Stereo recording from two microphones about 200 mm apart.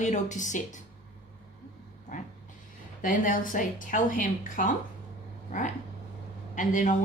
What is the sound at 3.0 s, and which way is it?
A woman's voice, 40° left (ahead or behind).